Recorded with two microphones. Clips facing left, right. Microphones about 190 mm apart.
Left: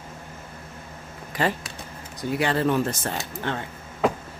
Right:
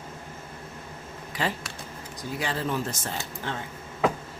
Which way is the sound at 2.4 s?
65° left (ahead or behind).